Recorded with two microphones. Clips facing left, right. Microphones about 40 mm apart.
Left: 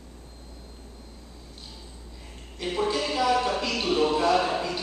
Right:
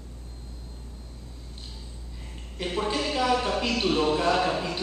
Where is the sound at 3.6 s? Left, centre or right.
Centre.